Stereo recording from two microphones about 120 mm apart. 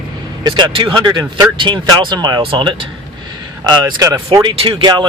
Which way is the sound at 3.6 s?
30° right (ahead or behind).